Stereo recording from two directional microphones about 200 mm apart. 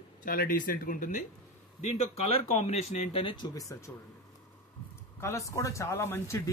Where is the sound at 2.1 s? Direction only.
30° left (ahead or behind); by 3.9 s 15° left (ahead or behind).